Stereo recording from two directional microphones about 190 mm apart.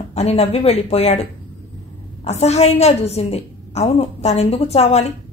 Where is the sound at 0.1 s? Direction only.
35° left (ahead or behind).